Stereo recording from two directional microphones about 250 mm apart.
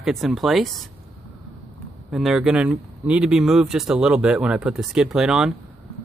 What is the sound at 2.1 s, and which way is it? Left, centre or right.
Speech, centre.